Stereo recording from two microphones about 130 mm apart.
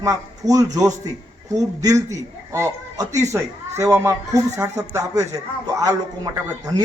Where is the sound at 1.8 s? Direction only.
25° right (ahead or behind).